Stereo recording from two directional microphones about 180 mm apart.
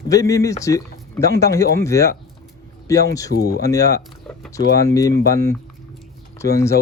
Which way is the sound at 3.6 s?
20° left (ahead or behind).